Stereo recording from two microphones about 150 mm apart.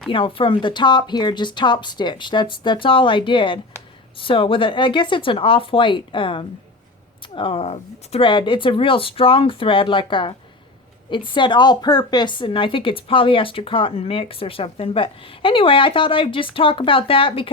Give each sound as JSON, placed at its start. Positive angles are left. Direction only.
{"t": 0.1, "sound": "a woman's voice", "side_deg": 35}
{"t": 11.3, "sound": "a woman's voice", "side_deg": 30}